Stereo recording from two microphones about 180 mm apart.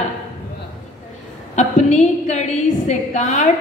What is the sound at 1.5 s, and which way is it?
A woman's voice, 40° left (ahead or behind).